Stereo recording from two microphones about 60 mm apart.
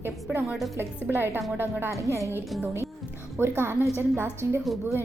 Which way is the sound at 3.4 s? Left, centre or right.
Right.